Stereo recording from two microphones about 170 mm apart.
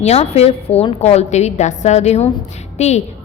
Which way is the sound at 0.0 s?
40° left (ahead or behind).